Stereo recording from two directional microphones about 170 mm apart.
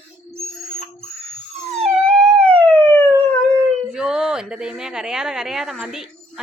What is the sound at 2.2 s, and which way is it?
Police car, 35° right (ahead or behind).